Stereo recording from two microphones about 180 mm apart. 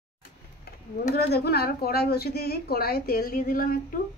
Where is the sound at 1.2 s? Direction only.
60° left (ahead or behind).